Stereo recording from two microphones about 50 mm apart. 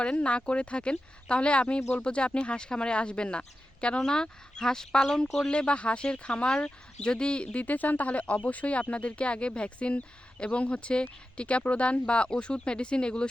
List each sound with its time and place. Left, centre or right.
0.0 s speech: left